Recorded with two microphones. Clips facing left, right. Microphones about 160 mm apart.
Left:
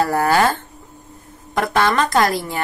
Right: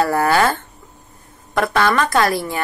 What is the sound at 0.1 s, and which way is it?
Speech, 15° left (ahead or behind).